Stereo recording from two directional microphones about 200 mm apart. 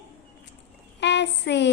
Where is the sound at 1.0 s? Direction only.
60° left (ahead or behind).